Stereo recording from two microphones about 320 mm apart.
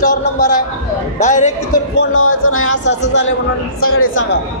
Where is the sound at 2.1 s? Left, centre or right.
Left.